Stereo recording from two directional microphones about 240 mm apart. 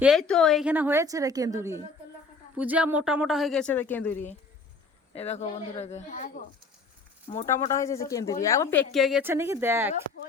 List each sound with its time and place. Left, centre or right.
0.0 s a woman's voice: centre
5.1 s speech: left
7.7 s speech: centre
8.9 s a woman's voice: centre